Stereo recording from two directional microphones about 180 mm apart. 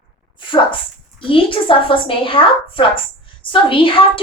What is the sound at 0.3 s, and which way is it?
Dog, 25° left (ahead or behind).